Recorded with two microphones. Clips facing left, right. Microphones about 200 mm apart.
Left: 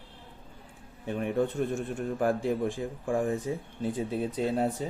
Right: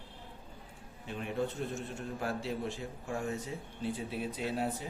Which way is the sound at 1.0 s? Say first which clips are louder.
Left 7 dB; 55° left (ahead or behind).